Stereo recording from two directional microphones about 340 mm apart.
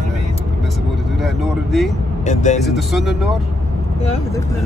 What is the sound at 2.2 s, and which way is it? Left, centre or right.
Speech, left.